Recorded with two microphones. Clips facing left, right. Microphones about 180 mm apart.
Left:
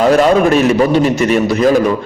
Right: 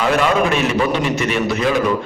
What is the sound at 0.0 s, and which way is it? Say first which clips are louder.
A man's voice: left 7 dB; 40° left (ahead or behind).